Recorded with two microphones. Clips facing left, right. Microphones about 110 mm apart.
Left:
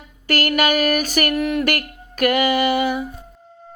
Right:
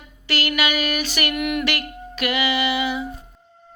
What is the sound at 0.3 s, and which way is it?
Mantra, 45° left (ahead or behind).